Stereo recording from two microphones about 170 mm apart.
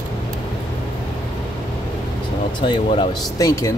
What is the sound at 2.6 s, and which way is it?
Speech, 30° left (ahead or behind).